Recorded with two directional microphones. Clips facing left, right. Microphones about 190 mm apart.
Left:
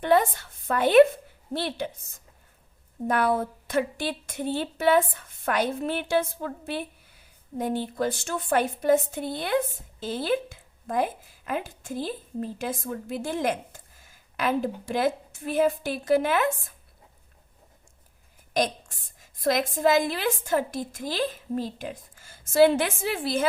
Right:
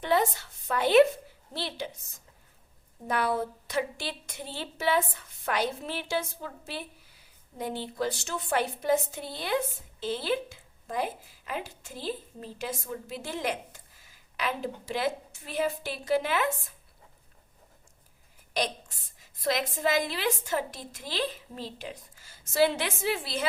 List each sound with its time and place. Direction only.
0.0 s a woman's voice: 55° left (ahead or behind)
3.1 s a woman's voice: 50° left (ahead or behind)
18.5 s a woman's voice: 50° left (ahead or behind)